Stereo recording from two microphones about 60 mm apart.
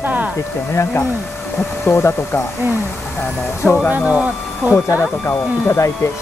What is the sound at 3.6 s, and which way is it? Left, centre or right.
Speech, centre.